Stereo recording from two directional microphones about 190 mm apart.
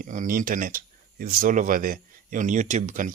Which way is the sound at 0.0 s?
45° right (ahead or behind).